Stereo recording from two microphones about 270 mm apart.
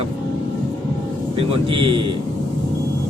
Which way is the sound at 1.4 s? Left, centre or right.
Centre.